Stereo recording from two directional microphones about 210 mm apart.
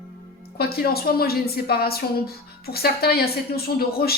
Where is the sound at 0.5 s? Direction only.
45° left (ahead or behind).